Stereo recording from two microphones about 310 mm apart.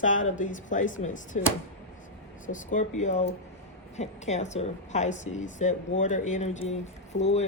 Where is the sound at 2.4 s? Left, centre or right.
Left.